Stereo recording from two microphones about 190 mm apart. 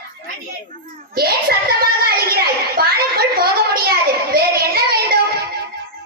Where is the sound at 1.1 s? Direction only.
55° right (ahead or behind).